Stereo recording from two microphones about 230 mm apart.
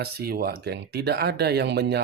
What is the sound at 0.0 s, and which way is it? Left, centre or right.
Speech, right.